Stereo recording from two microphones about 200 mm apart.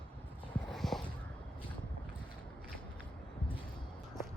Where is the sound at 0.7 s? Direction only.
Centre (ahead or behind).